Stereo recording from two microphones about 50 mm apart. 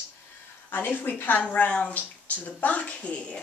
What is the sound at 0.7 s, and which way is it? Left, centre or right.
A woman's voice, left.